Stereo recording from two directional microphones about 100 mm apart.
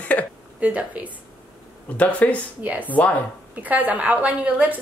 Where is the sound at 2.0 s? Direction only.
15° left (ahead or behind).